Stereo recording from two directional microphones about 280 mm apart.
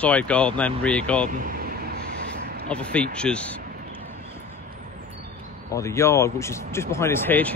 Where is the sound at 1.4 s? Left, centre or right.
Right.